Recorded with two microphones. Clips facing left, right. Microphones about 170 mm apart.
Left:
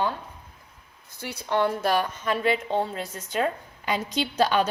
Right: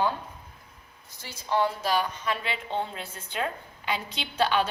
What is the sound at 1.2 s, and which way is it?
A woman's voice, 65° left (ahead or behind).